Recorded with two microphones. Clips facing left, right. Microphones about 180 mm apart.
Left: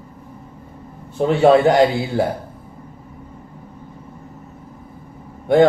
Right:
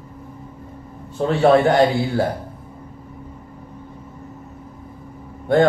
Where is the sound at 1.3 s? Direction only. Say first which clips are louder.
Left 2 dB; 20° left (ahead or behind).